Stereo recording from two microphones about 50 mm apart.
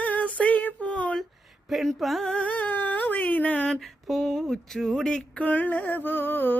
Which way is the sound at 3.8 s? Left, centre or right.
Centre.